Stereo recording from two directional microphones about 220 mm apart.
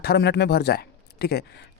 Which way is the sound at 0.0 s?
50° left (ahead or behind).